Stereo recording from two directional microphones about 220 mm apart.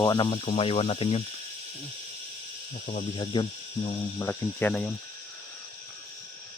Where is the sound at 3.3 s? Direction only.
20° left (ahead or behind).